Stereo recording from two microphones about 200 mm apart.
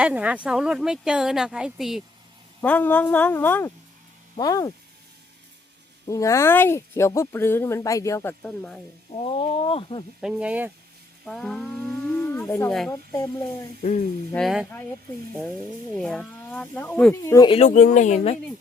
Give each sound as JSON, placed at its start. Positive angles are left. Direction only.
{"t": 0.0, "sound": "speech", "side_deg": -5}
{"t": 2.6, "sound": "speech", "side_deg": 10}
{"t": 6.1, "sound": "speech", "side_deg": 15}
{"t": 9.1, "sound": "speech", "side_deg": 30}
{"t": 10.2, "sound": "speech", "side_deg": -5}
{"t": 14.3, "sound": "speech", "side_deg": 0}
{"t": 16.0, "sound": "speech", "side_deg": 5}